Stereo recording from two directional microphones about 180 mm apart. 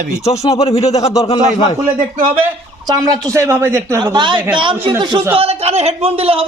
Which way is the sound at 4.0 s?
25° right (ahead or behind).